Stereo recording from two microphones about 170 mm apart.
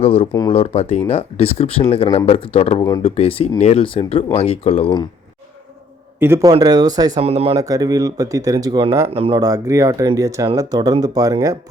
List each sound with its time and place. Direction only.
0.0 s speech: 35° left (ahead or behind)
6.1 s a man's voice: 15° right (ahead or behind)
7.2 s speech: 35° right (ahead or behind)
7.5 s speech: 20° right (ahead or behind)
9.0 s speech: 35° right (ahead or behind)
9.4 s speech: 20° right (ahead or behind)